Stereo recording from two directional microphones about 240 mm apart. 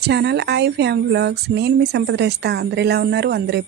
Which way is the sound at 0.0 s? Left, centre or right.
Right.